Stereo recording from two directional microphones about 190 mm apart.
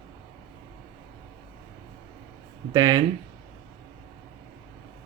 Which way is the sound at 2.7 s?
20° right (ahead or behind).